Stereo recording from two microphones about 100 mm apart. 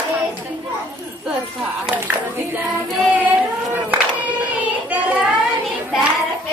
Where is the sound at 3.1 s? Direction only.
15° right (ahead or behind).